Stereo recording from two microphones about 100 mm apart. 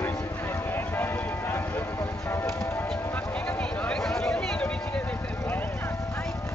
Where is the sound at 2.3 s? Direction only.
25° left (ahead or behind).